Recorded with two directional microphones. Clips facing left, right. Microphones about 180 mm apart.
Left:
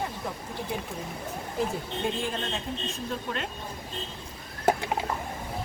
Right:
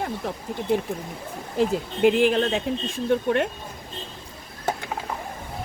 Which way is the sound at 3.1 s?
55° right (ahead or behind).